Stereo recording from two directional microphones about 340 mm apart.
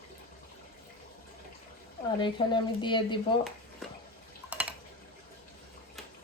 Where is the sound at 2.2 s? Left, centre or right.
Centre.